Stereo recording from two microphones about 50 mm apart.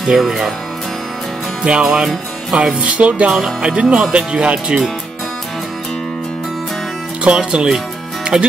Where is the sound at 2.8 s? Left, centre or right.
Right.